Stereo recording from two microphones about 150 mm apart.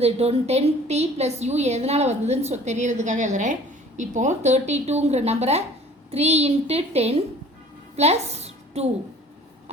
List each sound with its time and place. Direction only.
0.0 s a woman's voice: 45° right (ahead or behind)